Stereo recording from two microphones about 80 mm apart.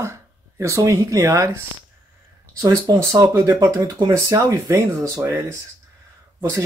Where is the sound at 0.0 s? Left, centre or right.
Right.